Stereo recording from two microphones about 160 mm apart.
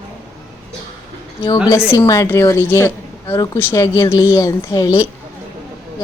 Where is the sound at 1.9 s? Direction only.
20° left (ahead or behind).